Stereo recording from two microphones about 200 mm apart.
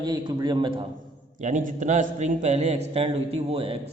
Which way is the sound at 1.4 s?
40° right (ahead or behind).